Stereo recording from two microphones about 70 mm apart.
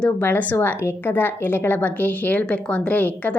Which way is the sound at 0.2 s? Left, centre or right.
Left.